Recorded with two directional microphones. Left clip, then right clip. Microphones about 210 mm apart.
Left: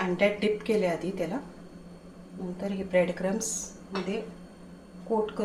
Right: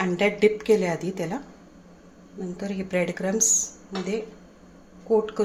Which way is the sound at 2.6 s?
55° right (ahead or behind).